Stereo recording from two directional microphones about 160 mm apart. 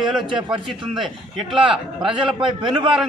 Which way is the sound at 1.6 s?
35° right (ahead or behind).